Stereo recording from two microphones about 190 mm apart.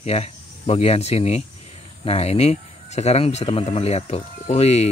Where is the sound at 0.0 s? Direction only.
30° left (ahead or behind).